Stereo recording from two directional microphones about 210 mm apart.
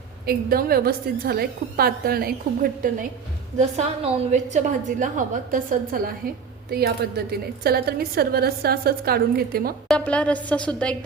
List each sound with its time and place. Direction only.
0.3 s a woman's voice: 45° right (ahead or behind)
3.6 s a woman's voice: 30° right (ahead or behind); by 9.7 s 45° right (ahead or behind)
9.9 s a woman's voice: 5° left (ahead or behind)